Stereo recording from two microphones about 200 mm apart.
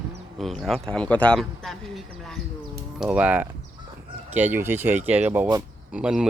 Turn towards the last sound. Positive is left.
turn(degrees=-5)  # may be behind; listen again after turning